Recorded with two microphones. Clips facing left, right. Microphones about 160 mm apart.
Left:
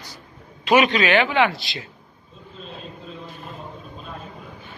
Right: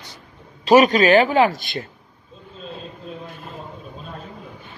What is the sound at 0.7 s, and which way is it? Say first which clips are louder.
Speech: right 5 dB; 40° right (ahead or behind).